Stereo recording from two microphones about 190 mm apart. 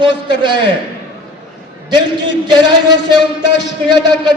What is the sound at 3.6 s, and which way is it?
Speech, 70° left (ahead or behind).